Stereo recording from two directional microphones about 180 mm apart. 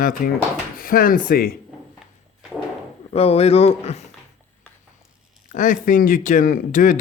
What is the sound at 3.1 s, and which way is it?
Speech, 35° left (ahead or behind).